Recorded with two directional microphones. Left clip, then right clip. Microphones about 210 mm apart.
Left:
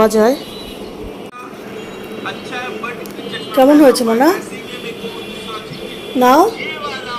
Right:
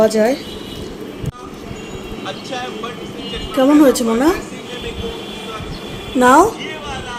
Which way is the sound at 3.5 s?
5° right (ahead or behind).